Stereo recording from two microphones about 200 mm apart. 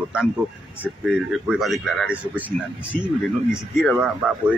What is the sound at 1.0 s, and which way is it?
Speech, 5° right (ahead or behind).